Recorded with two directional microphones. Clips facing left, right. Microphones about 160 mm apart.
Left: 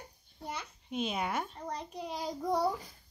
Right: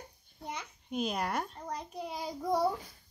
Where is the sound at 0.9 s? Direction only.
Centre (ahead or behind).